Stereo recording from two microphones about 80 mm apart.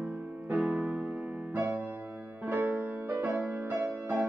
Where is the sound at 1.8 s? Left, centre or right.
Centre.